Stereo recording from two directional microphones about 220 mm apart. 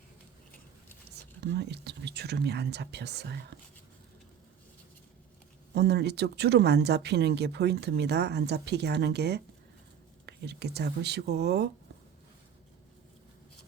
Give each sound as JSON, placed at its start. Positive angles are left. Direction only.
{"t": 1.5, "sound": "speech", "side_deg": -50}
{"t": 5.7, "sound": "speech", "side_deg": -50}